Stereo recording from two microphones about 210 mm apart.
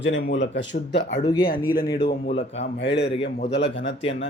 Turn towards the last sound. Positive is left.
turn(degrees=60)  # may be behind; listen again after turning